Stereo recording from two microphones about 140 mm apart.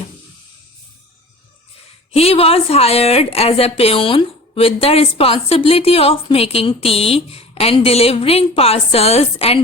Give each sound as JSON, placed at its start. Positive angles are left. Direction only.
{"t": 2.1, "sound": "a woman's voice", "side_deg": 45}